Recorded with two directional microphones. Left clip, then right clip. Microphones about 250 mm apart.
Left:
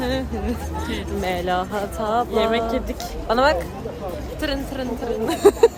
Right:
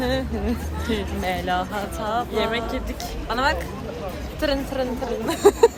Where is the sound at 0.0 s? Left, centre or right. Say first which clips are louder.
Even; centre.